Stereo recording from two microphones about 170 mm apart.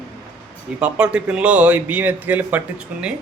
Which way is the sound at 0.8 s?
5° right (ahead or behind).